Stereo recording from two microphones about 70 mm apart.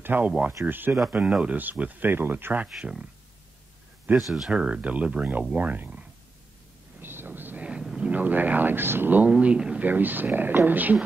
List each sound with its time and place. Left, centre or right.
0.0 s speech: right
1.1 s speech: centre
2.8 s speech: centre
4.2 s speech: centre
4.5 s speech: centre
7.0 s thunder: right
7.6 s a sound: centre
8.1 s speech: right
9.3 s speech: centre
9.8 s speech: right